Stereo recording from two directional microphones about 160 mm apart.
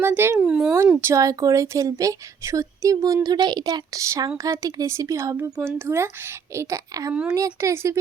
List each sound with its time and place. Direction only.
0.0 s a woman's voice: 15° right (ahead or behind)
1.0 s a woman's voice: 20° right (ahead or behind)
7.1 s a woman's voice: 5° right (ahead or behind)
7.3 s a woman's voice: 20° right (ahead or behind)